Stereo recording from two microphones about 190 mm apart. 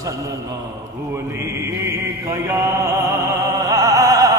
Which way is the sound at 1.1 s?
15° right (ahead or behind).